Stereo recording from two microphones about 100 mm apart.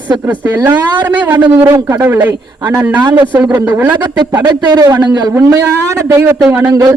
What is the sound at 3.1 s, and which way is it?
Speech, 45° right (ahead or behind).